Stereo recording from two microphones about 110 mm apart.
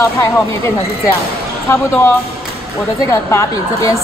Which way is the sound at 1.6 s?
25° left (ahead or behind).